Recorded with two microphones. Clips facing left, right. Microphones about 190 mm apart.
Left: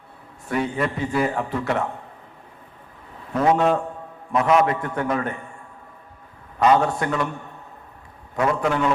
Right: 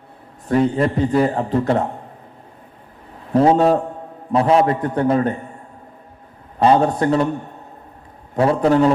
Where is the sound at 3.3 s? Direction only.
30° right (ahead or behind).